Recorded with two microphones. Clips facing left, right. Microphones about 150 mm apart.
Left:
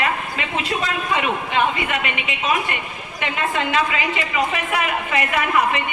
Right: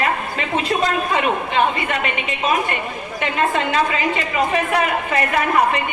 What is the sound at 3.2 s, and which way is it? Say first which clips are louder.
A man's voice: right 3 dB; 40° right (ahead or behind).